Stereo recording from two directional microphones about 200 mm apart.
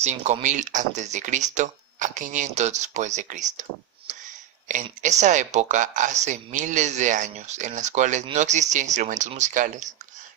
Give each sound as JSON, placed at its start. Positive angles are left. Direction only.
{"t": 0.0, "sound": "speech", "side_deg": -35}
{"t": 4.1, "sound": "a sound", "side_deg": -35}
{"t": 4.7, "sound": "speech", "side_deg": -35}